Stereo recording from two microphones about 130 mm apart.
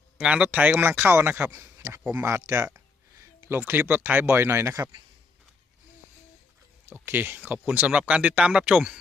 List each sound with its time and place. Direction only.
0.2 s speech: 10° right (ahead or behind)
2.7 s a sound: 20° right (ahead or behind)
3.7 s speech: 15° right (ahead or behind)
6.8 s speech: 15° right (ahead or behind)